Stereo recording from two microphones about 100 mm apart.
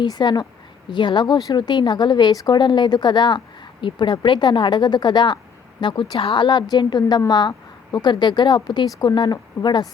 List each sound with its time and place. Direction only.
0.0 s a woman's voice: 45° left (ahead or behind)